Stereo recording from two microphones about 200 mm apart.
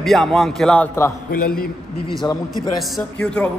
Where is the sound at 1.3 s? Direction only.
45° left (ahead or behind).